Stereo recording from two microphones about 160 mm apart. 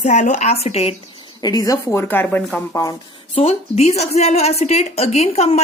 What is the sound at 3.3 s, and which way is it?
A woman's voice, 40° left (ahead or behind).